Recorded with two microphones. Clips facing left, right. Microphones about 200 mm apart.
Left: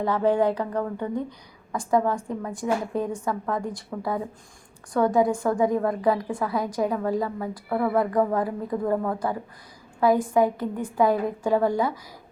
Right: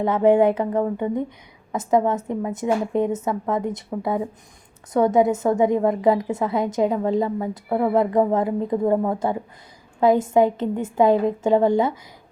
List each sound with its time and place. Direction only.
0.0 s a woman's voice: 20° right (ahead or behind)